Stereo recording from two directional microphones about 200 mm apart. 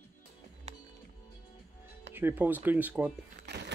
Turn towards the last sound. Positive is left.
turn(degrees=-55)  # may be behind; listen again after turning